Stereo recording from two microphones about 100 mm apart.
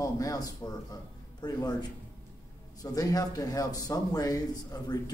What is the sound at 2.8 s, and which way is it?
A man's voice, 40° left (ahead or behind).